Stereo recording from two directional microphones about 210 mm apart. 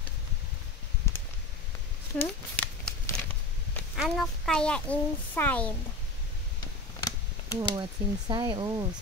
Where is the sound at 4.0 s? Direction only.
Centre (ahead or behind).